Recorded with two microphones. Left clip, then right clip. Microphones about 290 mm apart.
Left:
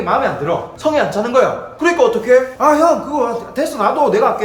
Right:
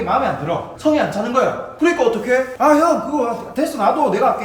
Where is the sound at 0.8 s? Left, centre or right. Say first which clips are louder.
Left 1 dB; centre.